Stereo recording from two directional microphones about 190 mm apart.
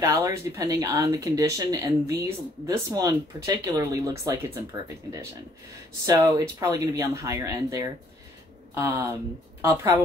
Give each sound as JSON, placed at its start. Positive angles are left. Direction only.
{"t": 0.0, "sound": "speech", "side_deg": -15}
{"t": 6.0, "sound": "a woman's voice", "side_deg": -20}